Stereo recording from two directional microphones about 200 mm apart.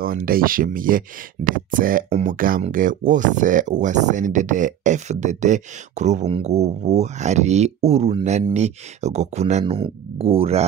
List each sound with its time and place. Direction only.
0.0 s speech: 45° right (ahead or behind); by 10.6 s 30° right (ahead or behind)